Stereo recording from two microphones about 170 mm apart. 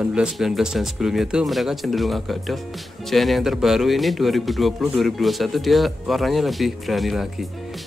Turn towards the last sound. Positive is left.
turn(degrees=0)  # may be behind; listen again after turning